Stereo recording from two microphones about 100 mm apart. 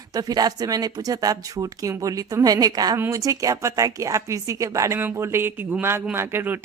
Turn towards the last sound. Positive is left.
turn(degrees=-20)  # may be behind; listen again after turning